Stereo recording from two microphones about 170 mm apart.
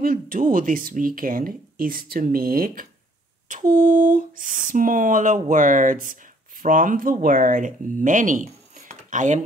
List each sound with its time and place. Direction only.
0.0 s speech: 55° right (ahead or behind)